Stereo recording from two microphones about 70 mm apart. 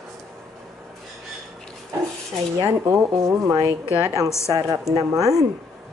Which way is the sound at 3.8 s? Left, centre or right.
Right.